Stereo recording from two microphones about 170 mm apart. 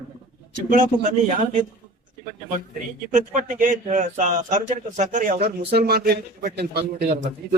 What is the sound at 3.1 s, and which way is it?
A man's voice, 50° right (ahead or behind).